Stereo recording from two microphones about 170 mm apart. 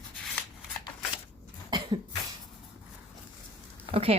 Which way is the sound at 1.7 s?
30° right (ahead or behind).